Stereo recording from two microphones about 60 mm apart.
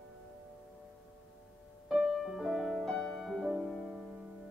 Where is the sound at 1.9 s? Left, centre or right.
Centre.